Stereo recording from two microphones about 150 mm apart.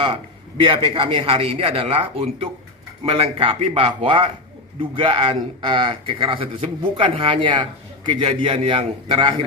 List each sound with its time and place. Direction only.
0.0 s speech: 35° right (ahead or behind)